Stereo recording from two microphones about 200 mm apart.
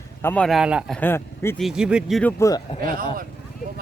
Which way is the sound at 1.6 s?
5° right (ahead or behind).